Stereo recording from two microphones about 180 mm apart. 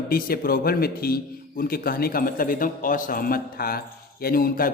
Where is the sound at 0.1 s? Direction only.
55° left (ahead or behind).